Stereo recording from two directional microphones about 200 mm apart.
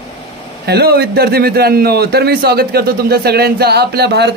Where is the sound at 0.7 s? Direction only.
50° right (ahead or behind).